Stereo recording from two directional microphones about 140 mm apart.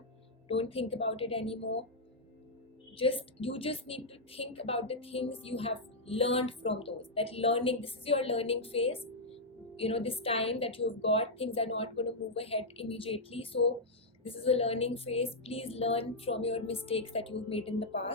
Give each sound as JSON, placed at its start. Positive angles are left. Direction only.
{"t": 0.4, "sound": "a woman's voice", "side_deg": 45}
{"t": 3.0, "sound": "a woman's voice", "side_deg": 40}